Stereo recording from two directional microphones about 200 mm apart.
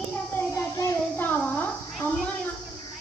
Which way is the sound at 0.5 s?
15° left (ahead or behind).